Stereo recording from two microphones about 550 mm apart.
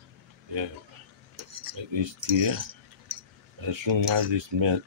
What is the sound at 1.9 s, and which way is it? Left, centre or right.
Cutlery, right.